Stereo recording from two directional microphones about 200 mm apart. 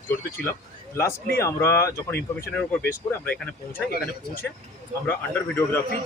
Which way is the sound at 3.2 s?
10° left (ahead or behind).